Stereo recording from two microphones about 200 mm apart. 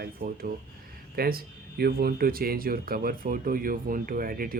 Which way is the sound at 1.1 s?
50° right (ahead or behind).